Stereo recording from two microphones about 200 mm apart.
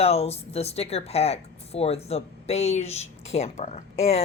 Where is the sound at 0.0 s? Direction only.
30° left (ahead or behind).